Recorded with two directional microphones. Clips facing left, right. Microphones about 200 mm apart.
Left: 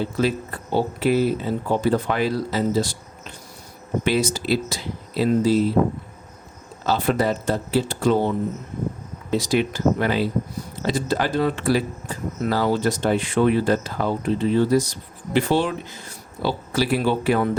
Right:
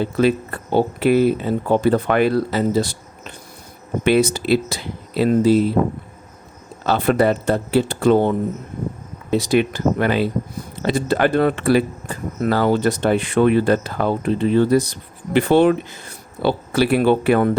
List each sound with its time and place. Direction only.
0.0 s speech: 60° right (ahead or behind)
6.8 s speech: 60° right (ahead or behind)
9.3 s speech: 60° right (ahead or behind)